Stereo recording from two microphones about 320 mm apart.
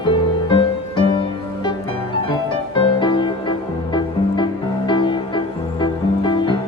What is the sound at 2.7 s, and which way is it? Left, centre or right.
Music, centre.